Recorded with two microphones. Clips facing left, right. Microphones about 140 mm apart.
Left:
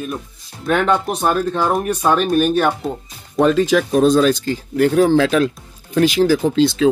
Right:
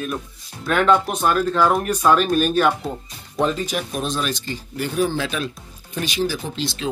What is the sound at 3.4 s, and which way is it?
Speech, 80° left.